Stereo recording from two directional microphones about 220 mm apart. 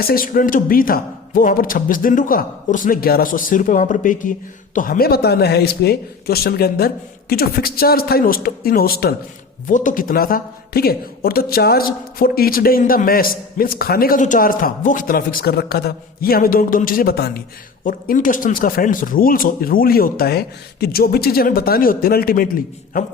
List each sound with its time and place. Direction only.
0.0 s speech: 40° left (ahead or behind)